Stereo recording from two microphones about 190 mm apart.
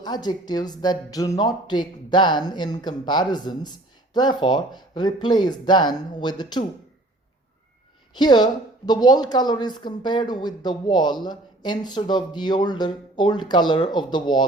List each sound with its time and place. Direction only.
0.0 s speech: 20° left (ahead or behind)
8.2 s speech: 20° left (ahead or behind)